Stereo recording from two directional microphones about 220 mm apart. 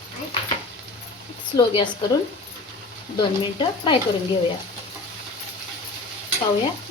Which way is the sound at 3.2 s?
20° left (ahead or behind).